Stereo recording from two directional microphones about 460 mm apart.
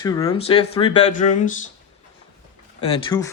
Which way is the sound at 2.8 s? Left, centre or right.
Centre.